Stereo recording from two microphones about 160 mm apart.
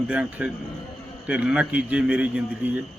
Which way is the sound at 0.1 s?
5° right (ahead or behind).